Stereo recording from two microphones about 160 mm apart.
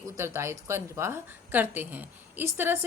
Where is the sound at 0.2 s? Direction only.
15° right (ahead or behind).